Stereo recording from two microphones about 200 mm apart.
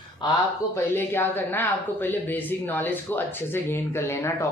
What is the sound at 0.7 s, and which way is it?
Speech, 10° left (ahead or behind).